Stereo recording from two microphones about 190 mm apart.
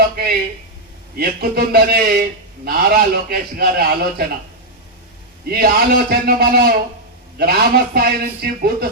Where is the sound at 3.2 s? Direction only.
55° right (ahead or behind).